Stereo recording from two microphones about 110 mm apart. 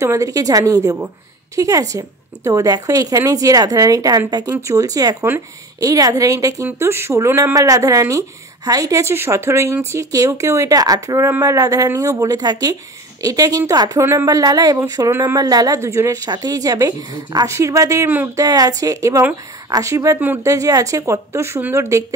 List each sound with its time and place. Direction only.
0.0 s a woman's voice: 30° right (ahead or behind)
15.3 s a woman's voice: 35° right (ahead or behind); by 18.4 s 20° right (ahead or behind)
18.4 s a woman's voice: 35° right (ahead or behind)